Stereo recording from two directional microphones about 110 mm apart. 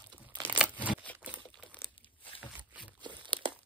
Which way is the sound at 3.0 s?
45° right (ahead or behind).